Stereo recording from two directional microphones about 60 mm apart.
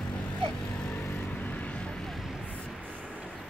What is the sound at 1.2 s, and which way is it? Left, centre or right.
Vehicle, left.